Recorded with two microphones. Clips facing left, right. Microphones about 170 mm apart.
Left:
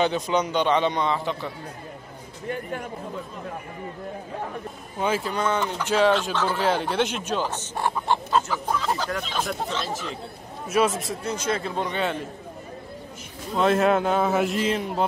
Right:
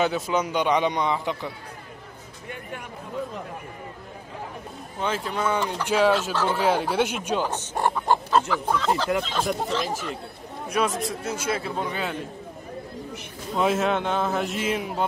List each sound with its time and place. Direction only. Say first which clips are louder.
0.0 s speech: left 1 dB; 5° right (ahead or behind)
2.4 s speech: left 7 dB; 40° left (ahead or behind)
5.0 s a man's voice: left 2 dB; 5° left (ahead or behind); by 7.9 s 15° right (ahead or behind)
8.5 s speech: right 2 dB; 10° left (ahead or behind)
9.5 s speech: right 3 dB; 15° right (ahead or behind)
10.7 s a man's voice: left 3 dB; centre (ahead or behind)
13.6 s a man's voice: left 3 dB; 5° right (ahead or behind)